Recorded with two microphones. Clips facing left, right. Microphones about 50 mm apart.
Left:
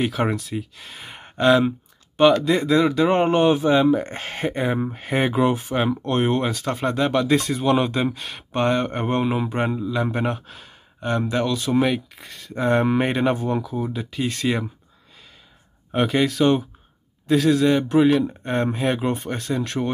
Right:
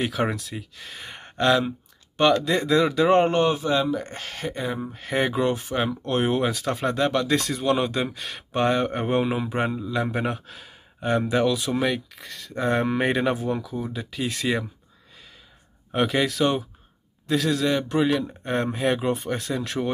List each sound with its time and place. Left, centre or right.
0.0 s speech: centre
3.3 s speech: left
4.8 s speech: centre
15.9 s speech: centre